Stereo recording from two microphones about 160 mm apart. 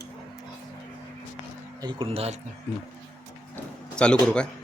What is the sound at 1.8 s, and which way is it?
Speech, 35° right (ahead or behind).